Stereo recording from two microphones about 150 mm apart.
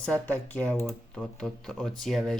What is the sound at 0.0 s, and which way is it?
Speech, 10° left (ahead or behind).